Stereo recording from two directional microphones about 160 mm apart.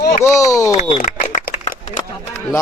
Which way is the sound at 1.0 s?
55° left (ahead or behind).